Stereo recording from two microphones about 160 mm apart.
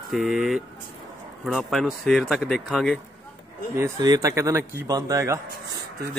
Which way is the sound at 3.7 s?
20° right (ahead or behind).